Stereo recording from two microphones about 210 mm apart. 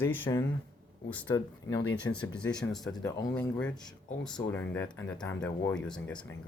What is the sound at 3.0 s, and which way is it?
Speech, 15° left (ahead or behind).